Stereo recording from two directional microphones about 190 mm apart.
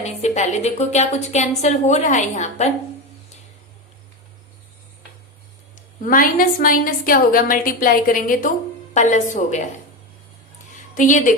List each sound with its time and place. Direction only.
0.0 s a woman's voice: 35° left (ahead or behind)
6.1 s a woman's voice: 50° left (ahead or behind)
10.9 s a woman's voice: 40° left (ahead or behind)